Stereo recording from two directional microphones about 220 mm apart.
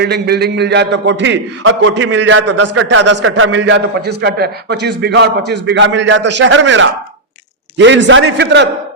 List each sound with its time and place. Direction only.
0.0 s a man's voice: 45° right (ahead or behind); by 2.8 s 80° right
2.8 s a man's voice: 55° right (ahead or behind)